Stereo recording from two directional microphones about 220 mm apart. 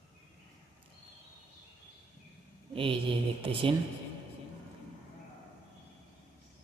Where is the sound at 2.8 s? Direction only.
25° right (ahead or behind).